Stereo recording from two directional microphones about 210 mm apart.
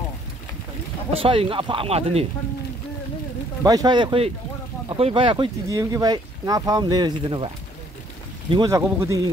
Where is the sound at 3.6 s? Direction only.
20° right (ahead or behind).